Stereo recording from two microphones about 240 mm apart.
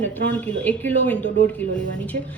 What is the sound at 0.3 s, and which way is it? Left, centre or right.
A woman's voice, centre.